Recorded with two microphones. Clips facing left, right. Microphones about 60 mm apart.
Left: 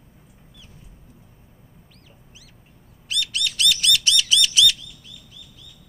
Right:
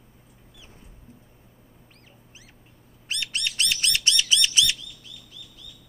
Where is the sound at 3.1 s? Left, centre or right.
Right.